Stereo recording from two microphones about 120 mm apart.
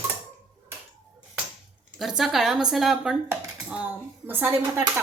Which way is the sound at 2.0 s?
5° right (ahead or behind).